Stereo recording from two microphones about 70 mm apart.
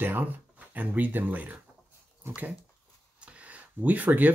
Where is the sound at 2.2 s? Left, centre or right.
Right.